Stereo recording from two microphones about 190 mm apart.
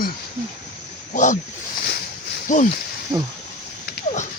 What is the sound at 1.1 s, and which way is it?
Speech, 40° left (ahead or behind).